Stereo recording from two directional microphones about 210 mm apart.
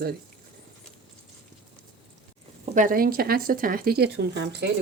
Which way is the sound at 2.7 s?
40° right (ahead or behind).